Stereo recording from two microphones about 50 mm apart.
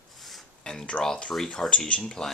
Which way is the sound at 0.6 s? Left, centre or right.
Centre.